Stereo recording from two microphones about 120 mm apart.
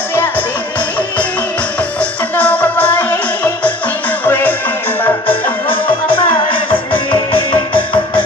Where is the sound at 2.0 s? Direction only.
15° left (ahead or behind).